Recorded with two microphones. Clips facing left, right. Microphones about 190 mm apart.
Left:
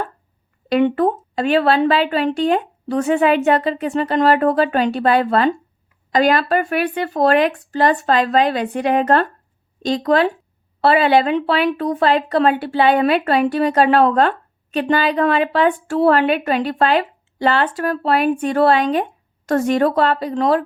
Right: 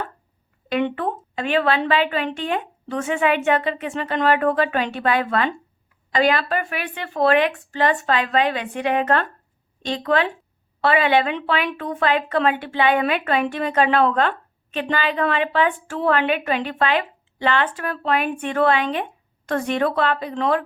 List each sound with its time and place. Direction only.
0.7 s speech: 40° left (ahead or behind)